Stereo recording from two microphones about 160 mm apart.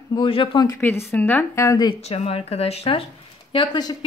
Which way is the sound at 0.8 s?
15° left (ahead or behind).